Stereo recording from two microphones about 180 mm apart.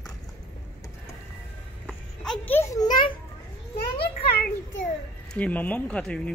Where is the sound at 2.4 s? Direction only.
10° left (ahead or behind).